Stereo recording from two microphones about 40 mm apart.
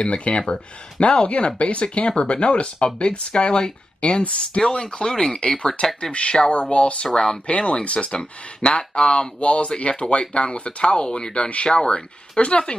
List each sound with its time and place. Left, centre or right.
0.0 s speech: left
4.6 s speech: centre
6.5 s speech: left